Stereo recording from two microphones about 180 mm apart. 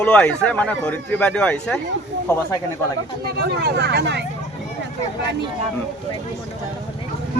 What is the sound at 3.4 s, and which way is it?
Speech, 65° right (ahead or behind).